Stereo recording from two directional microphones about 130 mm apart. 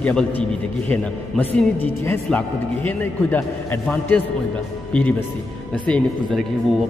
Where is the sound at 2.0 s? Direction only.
15° left (ahead or behind).